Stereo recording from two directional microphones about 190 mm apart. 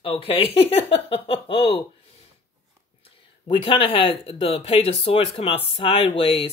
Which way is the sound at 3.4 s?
30° left (ahead or behind).